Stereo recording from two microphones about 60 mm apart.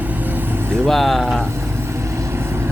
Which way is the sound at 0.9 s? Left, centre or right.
Centre.